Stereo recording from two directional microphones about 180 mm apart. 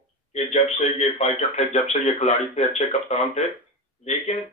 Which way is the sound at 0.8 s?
40° left (ahead or behind).